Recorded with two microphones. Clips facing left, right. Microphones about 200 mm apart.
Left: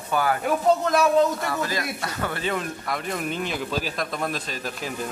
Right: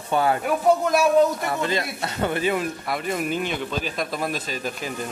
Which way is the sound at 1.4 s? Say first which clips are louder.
Right 2 dB; 25° right (ahead or behind).